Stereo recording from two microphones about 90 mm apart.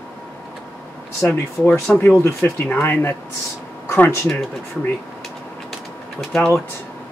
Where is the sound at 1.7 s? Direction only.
15° left (ahead or behind).